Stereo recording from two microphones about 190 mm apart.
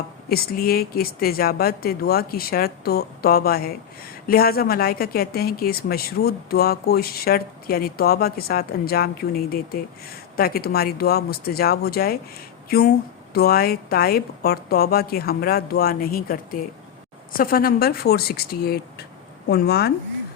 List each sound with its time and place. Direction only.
0.3 s speech: 50° left (ahead or behind)